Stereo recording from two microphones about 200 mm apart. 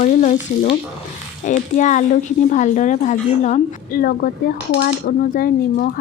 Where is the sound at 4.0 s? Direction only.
50° left (ahead or behind).